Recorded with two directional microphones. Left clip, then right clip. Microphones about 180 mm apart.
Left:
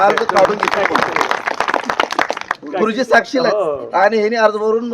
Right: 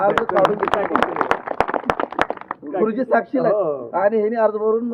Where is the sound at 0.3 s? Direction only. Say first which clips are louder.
Left 4 dB; 30° right (ahead or behind).